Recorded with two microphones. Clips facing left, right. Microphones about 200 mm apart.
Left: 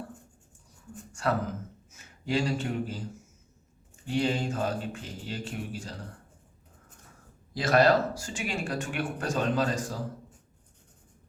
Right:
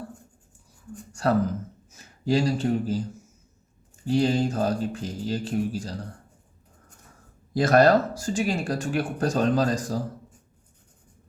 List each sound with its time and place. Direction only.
1.9 s speech: 35° right (ahead or behind)
4.0 s speech: 35° right (ahead or behind)
7.5 s speech: 45° right (ahead or behind)